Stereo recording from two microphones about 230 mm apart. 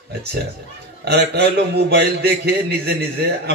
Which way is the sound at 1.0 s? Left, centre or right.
Right.